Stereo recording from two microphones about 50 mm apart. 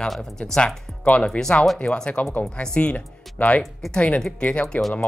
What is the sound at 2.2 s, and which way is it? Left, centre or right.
Speech, left.